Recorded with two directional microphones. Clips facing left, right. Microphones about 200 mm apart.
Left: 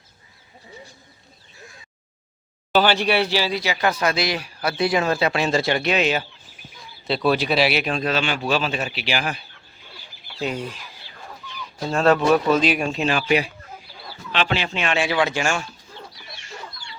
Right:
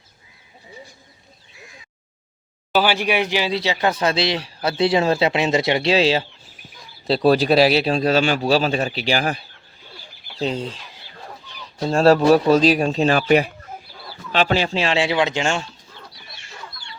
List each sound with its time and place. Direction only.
2.7 s a man's voice: 10° right (ahead or behind); by 9.4 s 40° right (ahead or behind)
10.4 s a man's voice: 25° right (ahead or behind)